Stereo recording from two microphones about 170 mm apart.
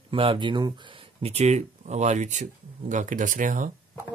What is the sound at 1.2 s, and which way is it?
Music, 40° right (ahead or behind).